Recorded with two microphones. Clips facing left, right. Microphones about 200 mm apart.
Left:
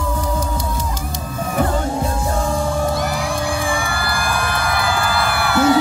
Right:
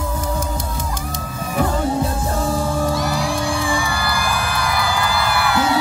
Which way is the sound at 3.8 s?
55° left (ahead or behind).